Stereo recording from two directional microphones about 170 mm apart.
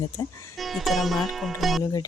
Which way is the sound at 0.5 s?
Centre (ahead or behind).